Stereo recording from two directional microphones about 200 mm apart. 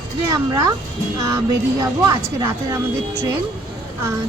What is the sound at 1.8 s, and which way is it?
Speech, 15° right (ahead or behind).